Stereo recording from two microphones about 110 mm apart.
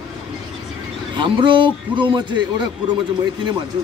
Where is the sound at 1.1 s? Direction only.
45° right (ahead or behind).